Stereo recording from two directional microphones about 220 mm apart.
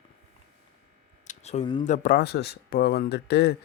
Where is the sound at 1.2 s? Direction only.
30° left (ahead or behind).